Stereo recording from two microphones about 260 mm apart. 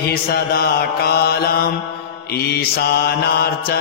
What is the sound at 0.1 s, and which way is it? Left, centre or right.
Mantra, left.